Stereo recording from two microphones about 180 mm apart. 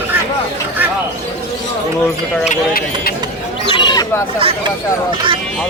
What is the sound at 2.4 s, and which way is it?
Speech, 55° left (ahead or behind).